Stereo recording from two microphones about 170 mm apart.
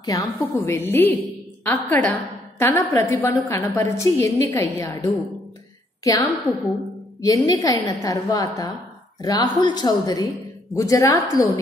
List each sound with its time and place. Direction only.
0.0 s a woman's voice: 20° left (ahead or behind)